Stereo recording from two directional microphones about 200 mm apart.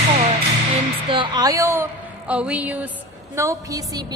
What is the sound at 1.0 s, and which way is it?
A woman's voice, 25° right (ahead or behind).